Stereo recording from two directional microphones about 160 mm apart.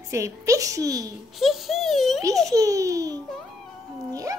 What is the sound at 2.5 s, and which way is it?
Speech, 20° right (ahead or behind).